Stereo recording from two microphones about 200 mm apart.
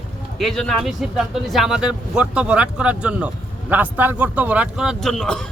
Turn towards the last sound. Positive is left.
turn(degrees=5)  # may be behind; listen again after turning